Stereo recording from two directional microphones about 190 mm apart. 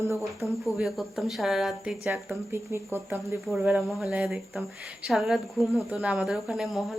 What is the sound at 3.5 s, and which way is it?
Speech, centre (ahead or behind).